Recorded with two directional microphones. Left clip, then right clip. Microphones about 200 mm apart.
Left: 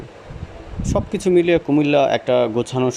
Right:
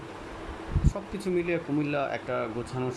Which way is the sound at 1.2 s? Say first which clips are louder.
Left 13 dB; 40° left (ahead or behind).